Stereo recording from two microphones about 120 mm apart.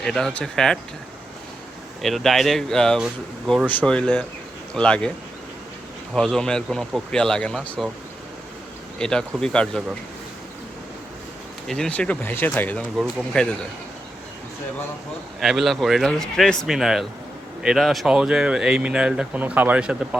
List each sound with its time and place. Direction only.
0.0 s speech: 5° left (ahead or behind)
2.0 s speech: centre (ahead or behind)
6.1 s speech: 5° left (ahead or behind)
9.0 s speech: 5° left (ahead or behind)
11.7 s speech: 10° left (ahead or behind)
15.4 s speech: centre (ahead or behind)